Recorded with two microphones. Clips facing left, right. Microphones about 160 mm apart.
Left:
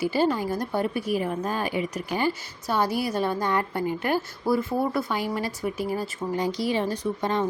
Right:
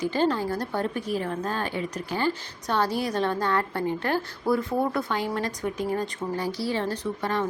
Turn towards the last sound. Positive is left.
turn(degrees=20)  # may be behind; listen again after turning